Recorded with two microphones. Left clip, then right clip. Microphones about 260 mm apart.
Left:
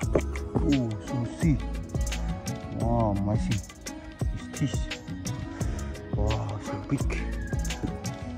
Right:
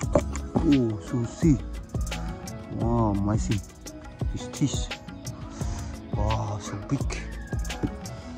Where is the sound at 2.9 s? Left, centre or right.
Centre.